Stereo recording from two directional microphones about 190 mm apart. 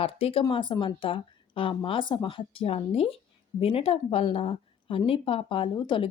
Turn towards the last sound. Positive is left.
turn(degrees=25)  # may be behind; listen again after turning